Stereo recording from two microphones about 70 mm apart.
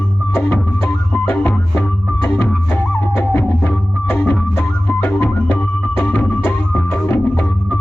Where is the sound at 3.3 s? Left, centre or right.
Centre.